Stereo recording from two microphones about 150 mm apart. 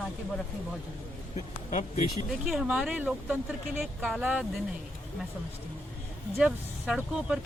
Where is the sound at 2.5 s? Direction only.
5° right (ahead or behind).